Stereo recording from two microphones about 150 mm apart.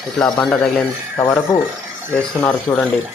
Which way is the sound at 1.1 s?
20° left (ahead or behind).